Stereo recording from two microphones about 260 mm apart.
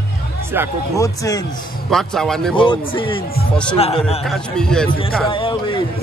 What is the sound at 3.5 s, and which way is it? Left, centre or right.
A man's voice, centre.